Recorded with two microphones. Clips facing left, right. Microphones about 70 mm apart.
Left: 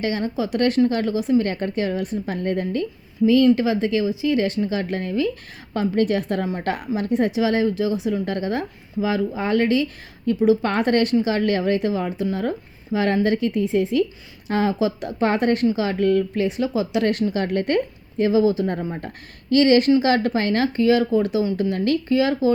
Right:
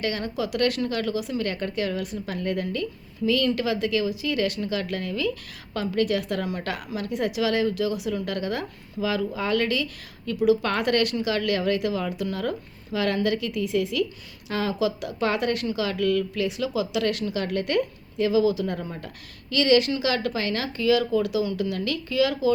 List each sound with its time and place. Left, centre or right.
0.0 s speech: left